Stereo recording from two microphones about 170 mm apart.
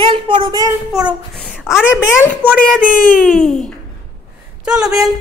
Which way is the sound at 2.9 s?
55° left (ahead or behind).